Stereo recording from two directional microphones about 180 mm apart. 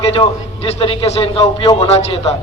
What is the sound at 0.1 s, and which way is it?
A man's voice, 30° left (ahead or behind).